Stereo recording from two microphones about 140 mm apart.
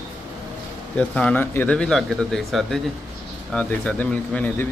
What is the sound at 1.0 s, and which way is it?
A man's voice, 10° left (ahead or behind).